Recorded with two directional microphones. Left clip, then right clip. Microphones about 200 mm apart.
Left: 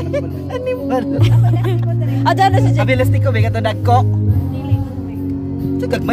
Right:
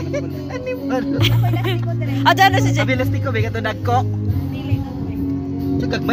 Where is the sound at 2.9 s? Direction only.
30° left (ahead or behind).